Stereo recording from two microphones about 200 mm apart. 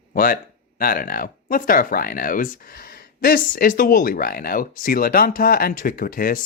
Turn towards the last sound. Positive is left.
turn(degrees=45)  # may be behind; listen again after turning